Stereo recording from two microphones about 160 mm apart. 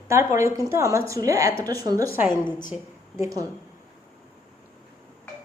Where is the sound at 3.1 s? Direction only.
20° right (ahead or behind).